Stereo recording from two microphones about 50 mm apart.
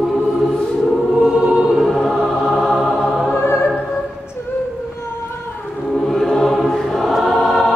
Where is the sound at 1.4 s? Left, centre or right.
Centre.